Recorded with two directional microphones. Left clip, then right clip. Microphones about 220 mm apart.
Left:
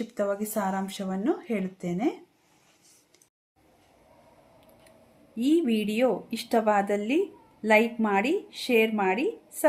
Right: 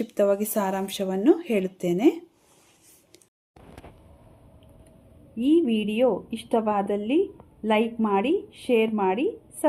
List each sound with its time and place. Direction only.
0.0 s speech: 40° right (ahead or behind)
5.4 s a woman's voice: 5° left (ahead or behind)